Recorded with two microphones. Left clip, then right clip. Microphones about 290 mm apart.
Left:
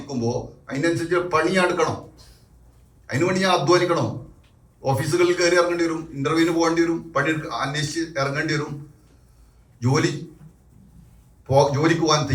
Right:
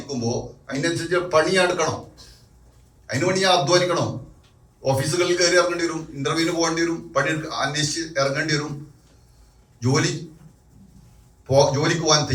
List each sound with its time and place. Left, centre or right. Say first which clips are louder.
0.1 s a man's voice: left 1 dB; left
3.1 s a man's voice: right 1 dB; left
9.8 s a man's voice: even; left
11.4 s a man's voice: even; left